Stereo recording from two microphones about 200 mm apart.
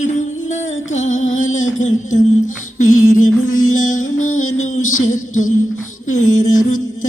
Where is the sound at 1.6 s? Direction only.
40° left (ahead or behind).